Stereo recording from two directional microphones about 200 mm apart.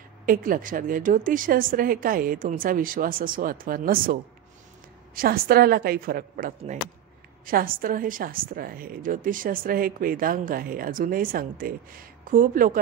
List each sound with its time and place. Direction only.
0.2 s a woman's voice: 45° right (ahead or behind)